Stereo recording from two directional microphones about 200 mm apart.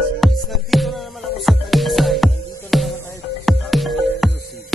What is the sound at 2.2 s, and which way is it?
Music, 30° left (ahead or behind).